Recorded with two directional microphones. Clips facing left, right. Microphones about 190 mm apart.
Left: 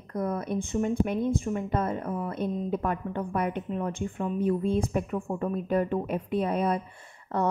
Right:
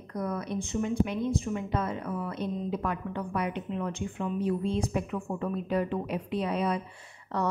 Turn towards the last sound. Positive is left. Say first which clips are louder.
# left 3 dB
turn(degrees=50)  # may be behind; listen again after turning